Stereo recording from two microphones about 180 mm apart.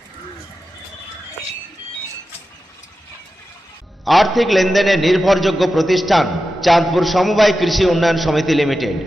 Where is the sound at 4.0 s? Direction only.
Centre (ahead or behind).